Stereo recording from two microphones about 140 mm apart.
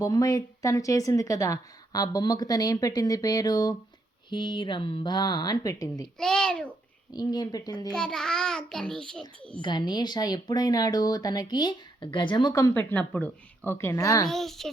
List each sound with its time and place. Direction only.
0.0 s speech: 25° left (ahead or behind)
6.1 s a child's voice: 5° left (ahead or behind)
7.1 s speech: 30° left (ahead or behind)
7.9 s a child's voice: 5° left (ahead or behind)
9.6 s speech: 35° left (ahead or behind)
14.3 s a child's voice: centre (ahead or behind)